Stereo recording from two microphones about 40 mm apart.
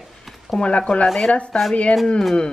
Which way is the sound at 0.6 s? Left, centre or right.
Left.